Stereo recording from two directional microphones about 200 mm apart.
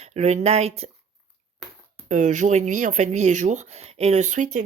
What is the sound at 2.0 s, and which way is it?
Speech, 40° right (ahead or behind).